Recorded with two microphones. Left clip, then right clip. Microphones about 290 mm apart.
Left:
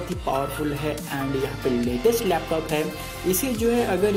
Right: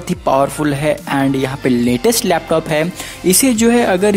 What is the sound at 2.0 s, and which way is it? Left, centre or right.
Speech, right.